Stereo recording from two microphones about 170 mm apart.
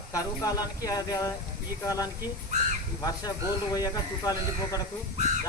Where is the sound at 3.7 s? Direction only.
20° left (ahead or behind).